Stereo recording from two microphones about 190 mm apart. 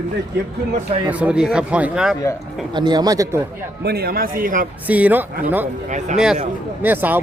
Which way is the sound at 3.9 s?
55° right (ahead or behind).